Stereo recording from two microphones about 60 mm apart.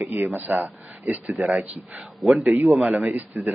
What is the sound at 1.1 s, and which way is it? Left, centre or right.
A man's voice, centre.